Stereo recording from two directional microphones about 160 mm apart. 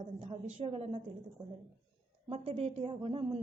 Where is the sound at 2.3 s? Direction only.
40° right (ahead or behind).